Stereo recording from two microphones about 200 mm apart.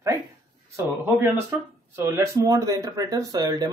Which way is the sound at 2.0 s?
20° right (ahead or behind).